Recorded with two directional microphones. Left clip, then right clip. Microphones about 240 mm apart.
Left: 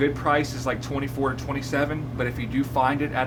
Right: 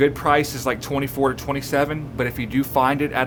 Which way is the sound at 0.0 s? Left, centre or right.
Right.